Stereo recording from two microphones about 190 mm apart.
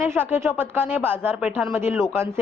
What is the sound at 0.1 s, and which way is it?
A woman's voice, 10° right (ahead or behind).